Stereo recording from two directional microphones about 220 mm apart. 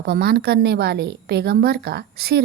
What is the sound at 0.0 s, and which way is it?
A woman's voice, 45° right (ahead or behind).